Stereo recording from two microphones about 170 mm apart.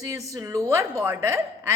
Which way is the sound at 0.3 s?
15° right (ahead or behind).